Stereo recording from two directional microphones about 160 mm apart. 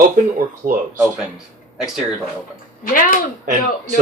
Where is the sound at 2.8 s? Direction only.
60° left (ahead or behind).